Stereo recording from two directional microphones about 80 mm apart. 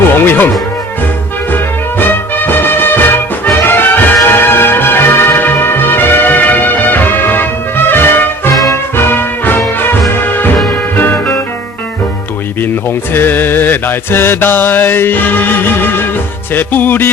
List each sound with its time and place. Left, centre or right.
0.1 s speech: left
1.5 s music: left
10.9 s music: left
13.1 s mantra: left
16.6 s music: left